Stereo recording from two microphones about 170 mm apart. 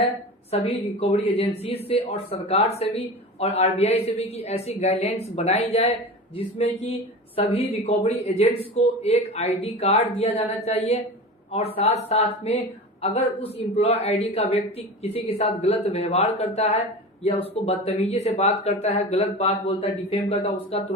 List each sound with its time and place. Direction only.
0.5 s speech: 40° left (ahead or behind)